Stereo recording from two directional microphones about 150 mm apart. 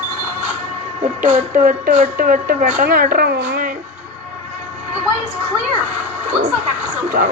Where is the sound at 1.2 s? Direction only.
60° right (ahead or behind).